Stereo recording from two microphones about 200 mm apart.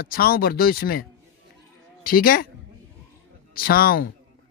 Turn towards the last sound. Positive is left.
turn(degrees=45)  # may be behind; listen again after turning